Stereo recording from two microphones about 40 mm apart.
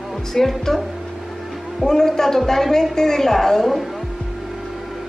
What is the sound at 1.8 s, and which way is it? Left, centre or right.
A woman's voice, centre.